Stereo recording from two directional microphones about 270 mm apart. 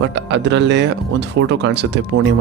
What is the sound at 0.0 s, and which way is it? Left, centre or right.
Speech, right.